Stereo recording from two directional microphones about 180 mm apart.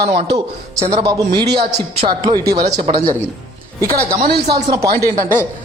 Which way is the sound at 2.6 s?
40° right (ahead or behind).